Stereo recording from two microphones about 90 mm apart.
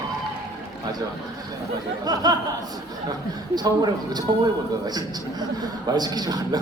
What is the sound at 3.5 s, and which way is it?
Speech, 50° right (ahead or behind).